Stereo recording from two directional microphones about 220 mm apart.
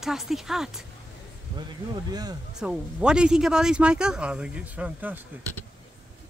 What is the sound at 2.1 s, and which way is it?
Speech, 20° right (ahead or behind).